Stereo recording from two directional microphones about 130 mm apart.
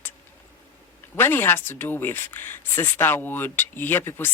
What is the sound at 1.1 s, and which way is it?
Speech, 15° left (ahead or behind).